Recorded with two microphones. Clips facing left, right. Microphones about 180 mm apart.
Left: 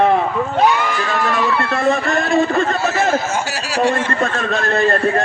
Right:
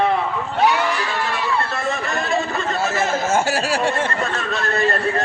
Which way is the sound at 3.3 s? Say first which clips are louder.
Right 1 dB; 55° right (ahead or behind).